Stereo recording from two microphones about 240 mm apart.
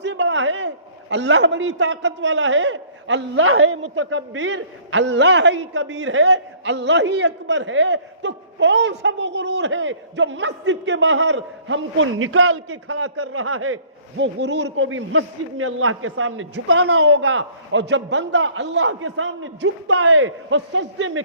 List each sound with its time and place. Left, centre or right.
0.0 s a sound: right
1.1 s a man's voice: right
14.2 s a man's voice: right